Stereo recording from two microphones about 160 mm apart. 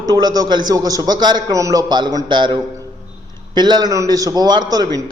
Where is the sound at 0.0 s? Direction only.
25° right (ahead or behind).